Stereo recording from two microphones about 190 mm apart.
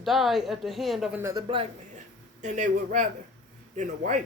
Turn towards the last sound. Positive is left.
turn(degrees=-40)  # may be behind; listen again after turning